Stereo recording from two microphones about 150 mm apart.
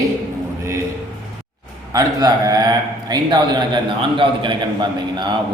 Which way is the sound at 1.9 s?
25° right (ahead or behind).